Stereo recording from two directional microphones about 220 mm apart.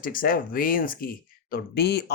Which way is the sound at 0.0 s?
40° left (ahead or behind).